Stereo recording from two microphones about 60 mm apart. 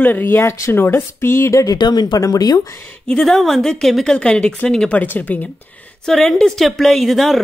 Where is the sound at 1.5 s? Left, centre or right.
Left.